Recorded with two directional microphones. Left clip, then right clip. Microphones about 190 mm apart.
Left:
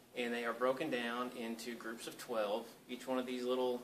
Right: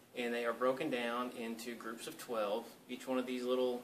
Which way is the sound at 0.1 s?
Centre (ahead or behind).